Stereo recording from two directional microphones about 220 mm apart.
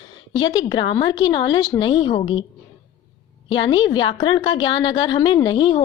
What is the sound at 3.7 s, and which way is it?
Speech, 20° left (ahead or behind).